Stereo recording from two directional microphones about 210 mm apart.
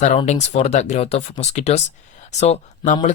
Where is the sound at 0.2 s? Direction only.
30° left (ahead or behind).